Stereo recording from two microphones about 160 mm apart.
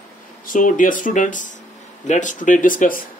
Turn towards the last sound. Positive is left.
turn(degrees=60)  # may be behind; listen again after turning